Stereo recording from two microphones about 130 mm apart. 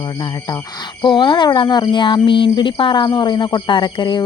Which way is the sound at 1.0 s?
35° left (ahead or behind).